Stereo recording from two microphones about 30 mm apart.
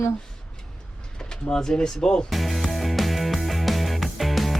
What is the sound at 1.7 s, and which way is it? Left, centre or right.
Speech, left.